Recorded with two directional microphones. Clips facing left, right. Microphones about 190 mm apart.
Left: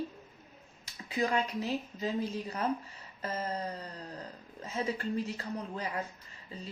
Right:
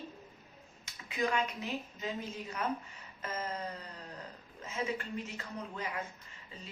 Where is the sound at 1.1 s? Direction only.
35° left (ahead or behind).